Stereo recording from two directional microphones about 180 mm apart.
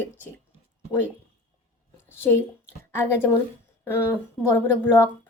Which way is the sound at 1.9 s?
15° left (ahead or behind).